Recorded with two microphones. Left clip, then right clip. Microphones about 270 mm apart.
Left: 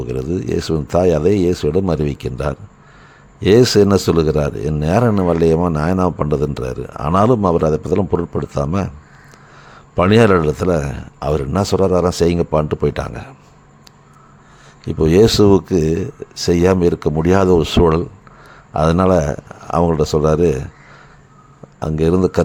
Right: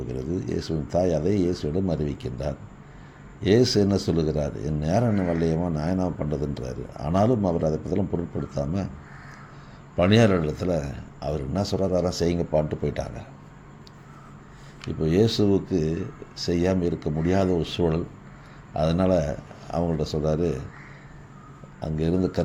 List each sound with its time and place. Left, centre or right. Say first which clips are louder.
0.0 s a man's voice: left 9 dB; left
9.9 s a man's voice: left 8 dB; left
14.8 s a man's voice: left 11 dB; left
21.8 s a man's voice: left 11 dB; left